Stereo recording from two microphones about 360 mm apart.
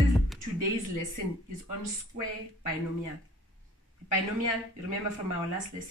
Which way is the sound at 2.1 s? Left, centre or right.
Right.